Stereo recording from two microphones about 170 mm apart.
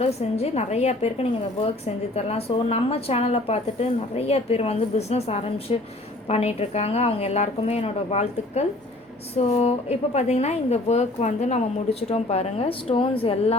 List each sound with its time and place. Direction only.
0.0 s a woman's voice: 40° left (ahead or behind)